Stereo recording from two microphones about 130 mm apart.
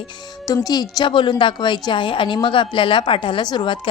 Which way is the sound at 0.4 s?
30° left (ahead or behind).